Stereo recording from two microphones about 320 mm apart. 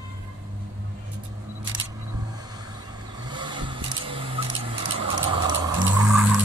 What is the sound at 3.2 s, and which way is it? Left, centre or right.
Vehicle, centre.